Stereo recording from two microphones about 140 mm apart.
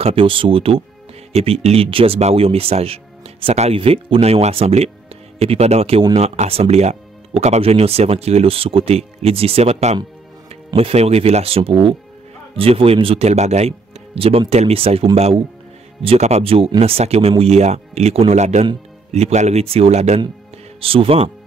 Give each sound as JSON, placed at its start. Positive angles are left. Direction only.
{"t": 0.0, "sound": "speech", "side_deg": -40}